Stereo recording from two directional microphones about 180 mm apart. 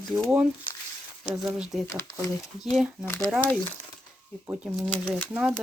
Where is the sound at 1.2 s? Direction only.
10° right (ahead or behind).